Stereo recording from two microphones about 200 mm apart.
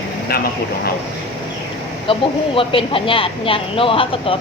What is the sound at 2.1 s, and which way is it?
Speech, 25° left (ahead or behind).